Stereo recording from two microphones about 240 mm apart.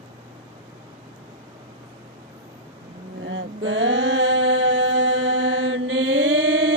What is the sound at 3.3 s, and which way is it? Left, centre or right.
Mantra, right.